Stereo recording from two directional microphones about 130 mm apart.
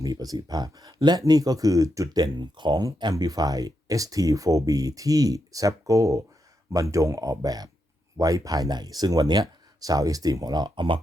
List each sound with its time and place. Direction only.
0.0 s speech: 30° right (ahead or behind)